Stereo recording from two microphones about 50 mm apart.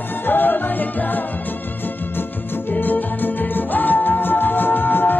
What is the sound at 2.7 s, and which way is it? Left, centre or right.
Music, left.